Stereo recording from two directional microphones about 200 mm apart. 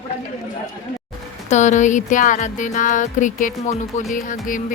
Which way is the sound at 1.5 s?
35° left (ahead or behind).